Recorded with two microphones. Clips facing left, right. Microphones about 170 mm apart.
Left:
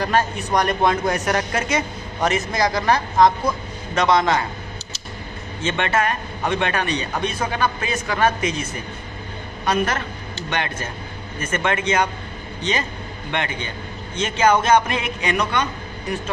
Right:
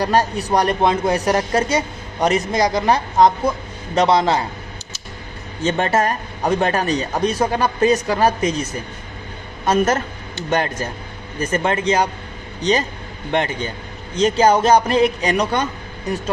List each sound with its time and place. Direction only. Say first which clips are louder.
0.0 s speech: right 3 dB; 35° right (ahead or behind)
5.6 s speech: right 3 dB; 40° right (ahead or behind)
10.5 s speech: right 6 dB; 40° right (ahead or behind)